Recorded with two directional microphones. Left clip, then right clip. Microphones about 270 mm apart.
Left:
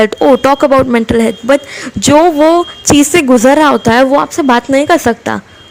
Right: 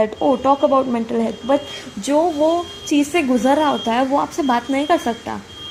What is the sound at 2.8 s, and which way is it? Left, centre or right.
A woman's voice, left.